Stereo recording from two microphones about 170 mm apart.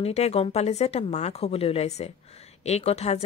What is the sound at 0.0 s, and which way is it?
A woman's voice, 40° left (ahead or behind).